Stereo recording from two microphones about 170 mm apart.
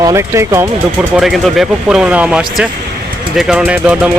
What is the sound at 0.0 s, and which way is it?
Speech, 20° right (ahead or behind).